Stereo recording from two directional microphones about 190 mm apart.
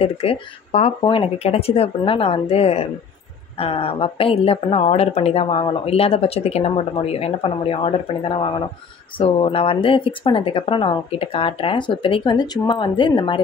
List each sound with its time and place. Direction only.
0.0 s a woman's voice: 30° left (ahead or behind)